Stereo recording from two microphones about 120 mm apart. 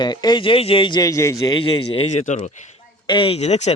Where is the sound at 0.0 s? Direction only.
35° left (ahead or behind).